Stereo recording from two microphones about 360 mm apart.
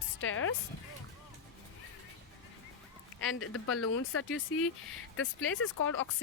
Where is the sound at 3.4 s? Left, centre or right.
Left.